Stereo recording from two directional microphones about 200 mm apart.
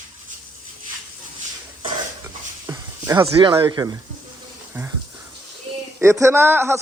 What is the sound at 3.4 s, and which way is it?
Speech, 20° right (ahead or behind).